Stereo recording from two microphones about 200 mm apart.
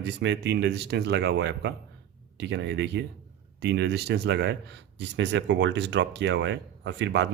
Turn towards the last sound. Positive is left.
turn(degrees=-60)  # may be behind; listen again after turning